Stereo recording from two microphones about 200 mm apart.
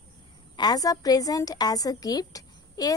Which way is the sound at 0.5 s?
20° left (ahead or behind).